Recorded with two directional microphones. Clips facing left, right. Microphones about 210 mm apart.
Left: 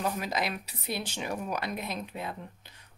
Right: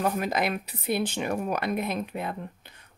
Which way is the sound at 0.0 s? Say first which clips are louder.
Right 5 dB; 55° right (ahead or behind).